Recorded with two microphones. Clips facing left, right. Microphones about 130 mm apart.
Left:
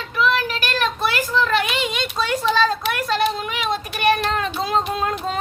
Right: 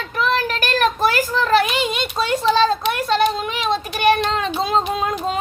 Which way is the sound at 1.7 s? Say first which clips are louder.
Right 2 dB; 25° right (ahead or behind).